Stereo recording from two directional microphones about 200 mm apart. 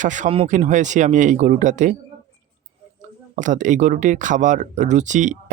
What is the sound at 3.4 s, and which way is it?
Speech, 40° right (ahead or behind).